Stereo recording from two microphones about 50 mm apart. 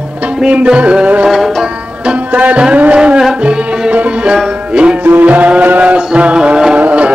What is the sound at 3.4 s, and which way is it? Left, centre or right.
Music, centre.